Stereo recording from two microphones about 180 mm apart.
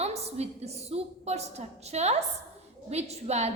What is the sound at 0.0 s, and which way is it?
A woman's voice, 35° right (ahead or behind).